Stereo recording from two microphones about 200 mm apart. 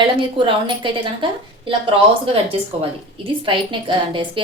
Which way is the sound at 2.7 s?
30° right (ahead or behind).